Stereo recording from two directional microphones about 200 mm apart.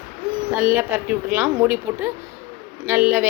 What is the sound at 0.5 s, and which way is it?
A woman's voice, 10° right (ahead or behind).